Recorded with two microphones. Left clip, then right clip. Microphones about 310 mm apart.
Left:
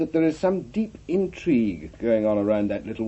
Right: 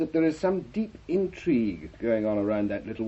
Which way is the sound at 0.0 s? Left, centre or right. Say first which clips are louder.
Left 3 dB; left.